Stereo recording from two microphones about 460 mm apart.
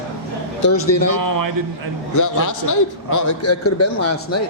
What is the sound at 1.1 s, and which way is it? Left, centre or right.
Speech, right.